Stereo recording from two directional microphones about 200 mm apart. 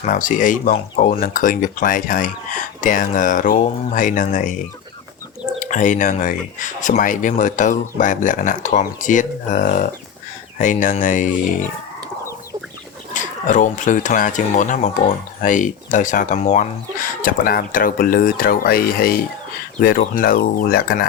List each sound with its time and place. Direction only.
0.0 s speech: 40° left (ahead or behind)
5.5 s speech: 40° left (ahead or behind)
13.1 s speech: 40° left (ahead or behind)
20.1 s speech: 45° left (ahead or behind)